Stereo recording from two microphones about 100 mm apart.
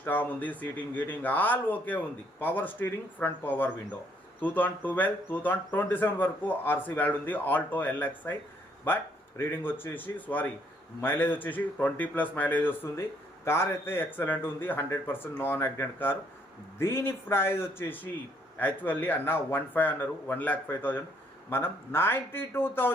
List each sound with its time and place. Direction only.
0.0 s speech: 20° left (ahead or behind)
9.4 s speech: 20° left (ahead or behind)